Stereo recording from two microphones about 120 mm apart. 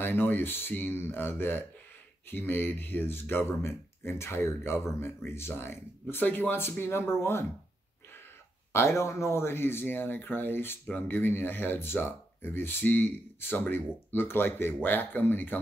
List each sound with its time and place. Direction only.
0.0 s speech: 20° left (ahead or behind)
8.7 s speech: 20° left (ahead or behind)